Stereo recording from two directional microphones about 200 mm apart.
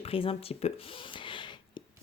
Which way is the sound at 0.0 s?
30° left (ahead or behind).